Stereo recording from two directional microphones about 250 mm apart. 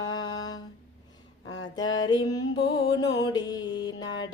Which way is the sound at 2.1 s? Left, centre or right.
Centre.